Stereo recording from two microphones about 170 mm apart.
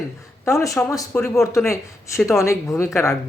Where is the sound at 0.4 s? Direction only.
20° left (ahead or behind).